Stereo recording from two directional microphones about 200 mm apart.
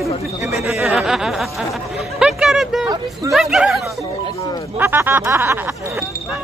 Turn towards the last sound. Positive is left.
turn(degrees=-10)  # may be behind; listen again after turning